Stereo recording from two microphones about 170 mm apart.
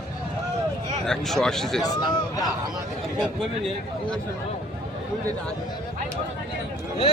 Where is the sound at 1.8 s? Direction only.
20° left (ahead or behind).